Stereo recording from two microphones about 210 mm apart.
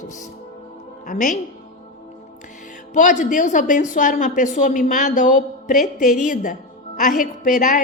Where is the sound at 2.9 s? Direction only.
35° left (ahead or behind).